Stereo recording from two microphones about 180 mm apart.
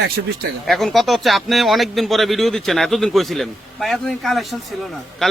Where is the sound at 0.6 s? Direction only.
Centre (ahead or behind).